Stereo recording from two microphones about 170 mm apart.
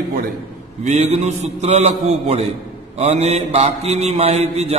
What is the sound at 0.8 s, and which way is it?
Mantra, 40° right (ahead or behind).